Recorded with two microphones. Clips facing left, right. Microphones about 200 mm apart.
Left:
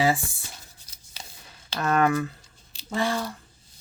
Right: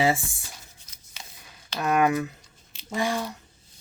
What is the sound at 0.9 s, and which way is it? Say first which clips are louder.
Scissors: even; 35° left (ahead or behind).